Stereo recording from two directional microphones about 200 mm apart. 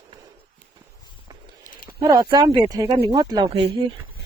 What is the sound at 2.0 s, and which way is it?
Speech, 20° right (ahead or behind).